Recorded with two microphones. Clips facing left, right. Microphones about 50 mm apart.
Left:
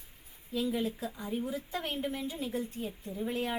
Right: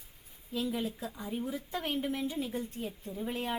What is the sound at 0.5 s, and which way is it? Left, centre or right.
A woman's voice, centre.